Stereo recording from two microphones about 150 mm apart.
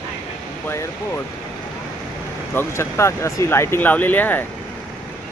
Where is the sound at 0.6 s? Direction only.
15° left (ahead or behind).